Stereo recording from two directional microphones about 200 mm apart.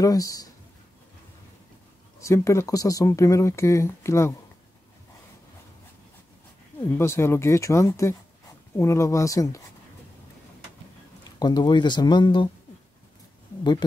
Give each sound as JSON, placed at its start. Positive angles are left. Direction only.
{"t": 0.0, "sound": "speech", "side_deg": 15}
{"t": 2.1, "sound": "speech", "side_deg": 15}
{"t": 6.8, "sound": "speech", "side_deg": 15}
{"t": 11.3, "sound": "speech", "side_deg": 20}